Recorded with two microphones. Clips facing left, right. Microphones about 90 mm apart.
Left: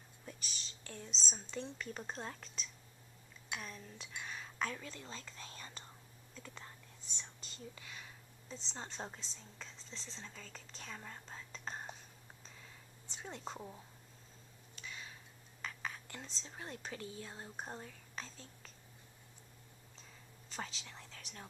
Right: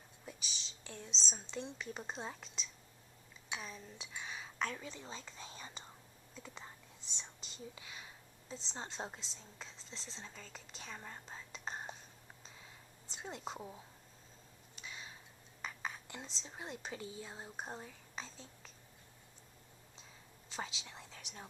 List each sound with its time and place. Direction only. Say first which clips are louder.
0.3 s speech: right 1 dB; centre (ahead or behind)
7.2 s whispering: right 1 dB; 15° right (ahead or behind)
8.9 s speech: right 1 dB; 5° right (ahead or behind)
13.2 s speech: right 1 dB; 5° right (ahead or behind)
14.8 s a sound: even; 20° right (ahead or behind)
15.6 s whispering: right 1 dB; 15° right (ahead or behind)
16.4 s speech: right 1 dB; 10° right (ahead or behind)
20.5 s whispering: right 1 dB; 10° right (ahead or behind)